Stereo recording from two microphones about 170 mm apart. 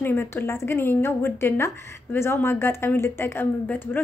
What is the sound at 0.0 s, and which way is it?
A woman's voice, 15° left (ahead or behind).